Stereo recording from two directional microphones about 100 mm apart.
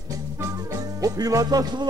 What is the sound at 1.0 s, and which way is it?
Music, 35° right (ahead or behind).